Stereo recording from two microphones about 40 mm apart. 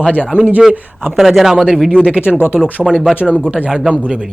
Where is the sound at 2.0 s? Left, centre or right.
Right.